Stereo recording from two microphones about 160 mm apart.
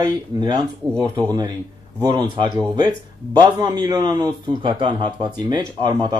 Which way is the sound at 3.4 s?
25° right (ahead or behind).